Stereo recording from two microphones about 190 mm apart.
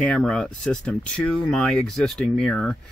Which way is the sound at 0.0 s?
5° left (ahead or behind).